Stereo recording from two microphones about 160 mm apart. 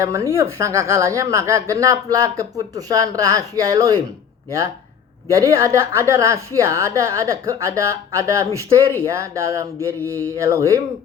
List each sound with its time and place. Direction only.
0.0 s speech: 20° right (ahead or behind)
5.3 s speech: 20° right (ahead or behind)
10.0 s a sound: 10° left (ahead or behind)
10.3 s speech: 20° right (ahead or behind)